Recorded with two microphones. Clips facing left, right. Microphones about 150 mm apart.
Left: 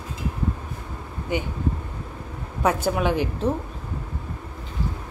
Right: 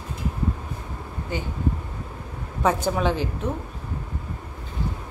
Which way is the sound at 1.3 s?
20° left (ahead or behind).